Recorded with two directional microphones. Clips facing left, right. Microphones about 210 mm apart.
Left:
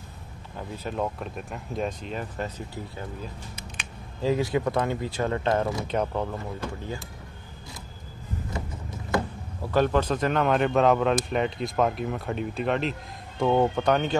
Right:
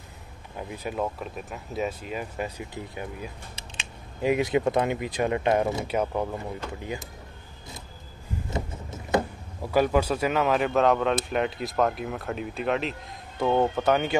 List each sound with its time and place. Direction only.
0.6 s speech: 15° right (ahead or behind)
0.9 s speech: centre (ahead or behind); by 5.9 s 25° right (ahead or behind)
5.9 s speech: 10° right (ahead or behind)
8.5 s vehicle: 25° right (ahead or behind)
9.6 s speech: 10° right (ahead or behind)